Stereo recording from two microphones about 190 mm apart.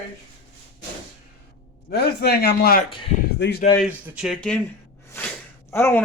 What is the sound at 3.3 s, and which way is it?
Speech, 65° left (ahead or behind).